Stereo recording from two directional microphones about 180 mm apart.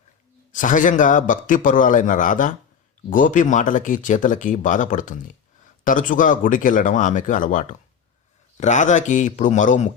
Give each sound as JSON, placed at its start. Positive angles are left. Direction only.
{"t": 0.5, "sound": "speech", "side_deg": 45}